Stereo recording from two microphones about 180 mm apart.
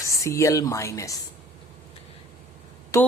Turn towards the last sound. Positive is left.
turn(degrees=15)  # may be behind; listen again after turning